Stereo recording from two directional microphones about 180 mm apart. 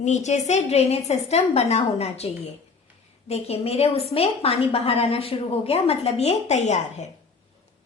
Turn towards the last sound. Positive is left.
turn(degrees=40)  # may be behind; listen again after turning